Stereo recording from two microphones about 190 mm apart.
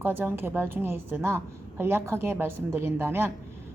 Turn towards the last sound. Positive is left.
turn(degrees=-10)  # may be behind; listen again after turning